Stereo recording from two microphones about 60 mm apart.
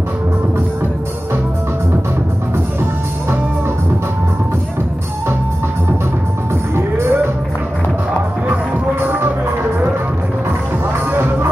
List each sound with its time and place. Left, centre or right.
6.7 s music: right
11.1 s music: right